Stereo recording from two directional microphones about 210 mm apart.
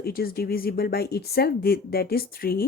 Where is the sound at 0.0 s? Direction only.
45° left (ahead or behind).